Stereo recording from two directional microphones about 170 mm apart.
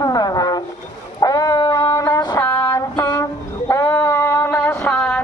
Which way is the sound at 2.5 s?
25° left (ahead or behind).